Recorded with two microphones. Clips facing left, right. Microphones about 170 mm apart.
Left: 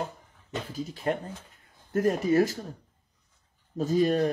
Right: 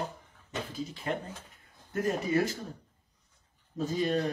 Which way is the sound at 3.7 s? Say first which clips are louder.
Left 5 dB; 45° left (ahead or behind).